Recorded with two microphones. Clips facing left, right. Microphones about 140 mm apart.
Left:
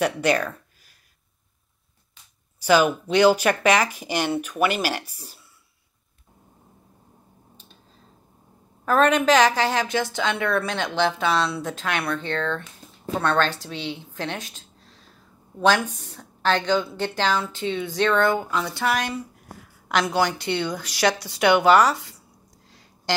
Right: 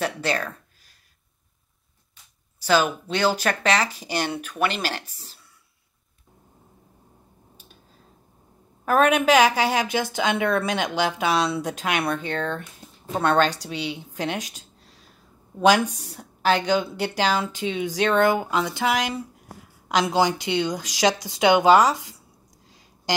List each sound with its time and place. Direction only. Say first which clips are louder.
0.0 s speech: left 4 dB; 15° left (ahead or behind)
2.6 s speech: left 3 dB; 10° left (ahead or behind)
8.8 s a woman's voice: even; 10° right (ahead or behind)
15.6 s a woman's voice: right 2 dB; 10° right (ahead or behind)
22.7 s a sound: left 1 dB; 15° right (ahead or behind)